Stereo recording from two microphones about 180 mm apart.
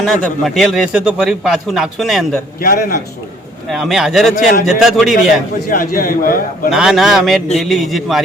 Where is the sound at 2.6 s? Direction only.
50° left (ahead or behind).